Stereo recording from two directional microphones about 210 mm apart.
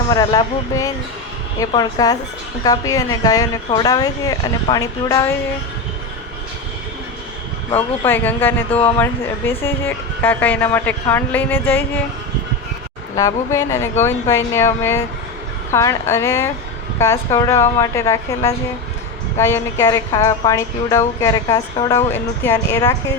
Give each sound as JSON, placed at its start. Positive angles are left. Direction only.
{"t": 0.1, "sound": "a woman's voice", "side_deg": 20}
{"t": 7.8, "sound": "a woman's voice", "side_deg": 10}
{"t": 13.1, "sound": "a woman's voice", "side_deg": 15}